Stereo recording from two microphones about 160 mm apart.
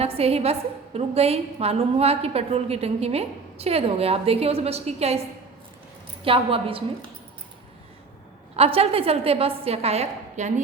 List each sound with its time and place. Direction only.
0.0 s a woman's voice: 40° right (ahead or behind)
6.2 s a woman's voice: 35° right (ahead or behind)
8.5 s a woman's voice: 40° right (ahead or behind)